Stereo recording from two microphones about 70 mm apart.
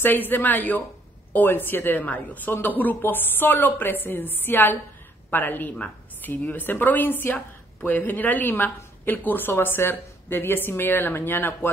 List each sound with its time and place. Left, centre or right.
0.3 s speech: left